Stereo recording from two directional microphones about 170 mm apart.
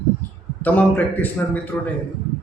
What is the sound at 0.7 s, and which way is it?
Speech, 10° left (ahead or behind).